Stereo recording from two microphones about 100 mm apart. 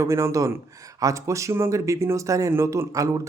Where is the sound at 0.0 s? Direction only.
30° right (ahead or behind).